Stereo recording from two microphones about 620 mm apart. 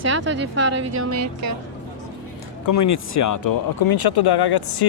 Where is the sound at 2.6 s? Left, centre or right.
Left.